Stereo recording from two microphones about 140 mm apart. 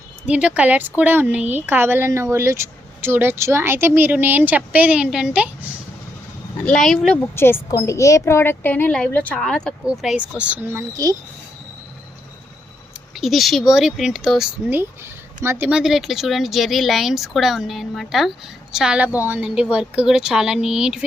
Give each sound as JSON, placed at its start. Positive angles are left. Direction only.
{"t": 0.3, "sound": "speech", "side_deg": -10}
{"t": 6.6, "sound": "speech", "side_deg": 5}
{"t": 7.3, "sound": "a woman's voice", "side_deg": 15}
{"t": 13.1, "sound": "speech", "side_deg": 0}
{"t": 14.7, "sound": "speech", "side_deg": -15}